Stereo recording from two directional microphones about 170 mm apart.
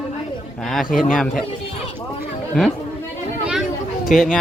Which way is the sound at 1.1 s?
Centre (ahead or behind).